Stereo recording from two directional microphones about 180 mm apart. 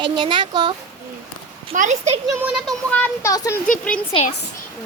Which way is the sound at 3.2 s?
15° left (ahead or behind).